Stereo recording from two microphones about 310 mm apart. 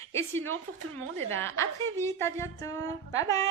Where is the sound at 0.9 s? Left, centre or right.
Right.